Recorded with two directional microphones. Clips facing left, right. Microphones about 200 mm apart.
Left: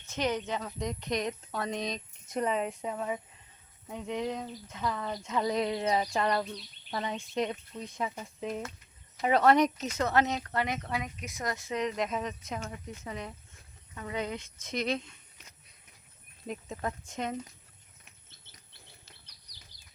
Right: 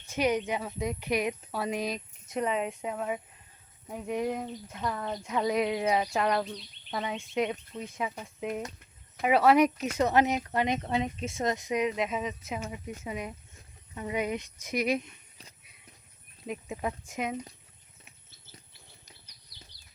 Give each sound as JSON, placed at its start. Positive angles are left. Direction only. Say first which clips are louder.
{"t": 0.0, "sound": "speech", "louder": "right 4 dB", "side_deg": -15}
{"t": 16.5, "sound": "speech", "louder": "right 2 dB", "side_deg": -10}